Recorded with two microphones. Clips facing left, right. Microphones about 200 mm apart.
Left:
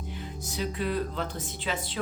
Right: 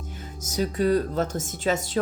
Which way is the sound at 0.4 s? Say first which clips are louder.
Right 8 dB; 45° right (ahead or behind).